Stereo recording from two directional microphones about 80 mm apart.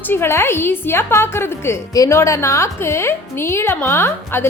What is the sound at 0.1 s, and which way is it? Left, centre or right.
Speech, left.